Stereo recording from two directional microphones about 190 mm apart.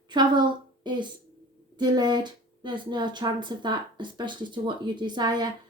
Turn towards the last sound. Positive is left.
turn(degrees=-20)  # may be behind; listen again after turning